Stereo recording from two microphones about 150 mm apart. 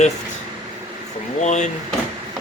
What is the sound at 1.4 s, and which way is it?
Speech, 50° left (ahead or behind).